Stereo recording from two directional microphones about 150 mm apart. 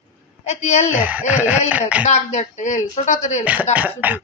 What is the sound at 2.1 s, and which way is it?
Speech, 50° left (ahead or behind).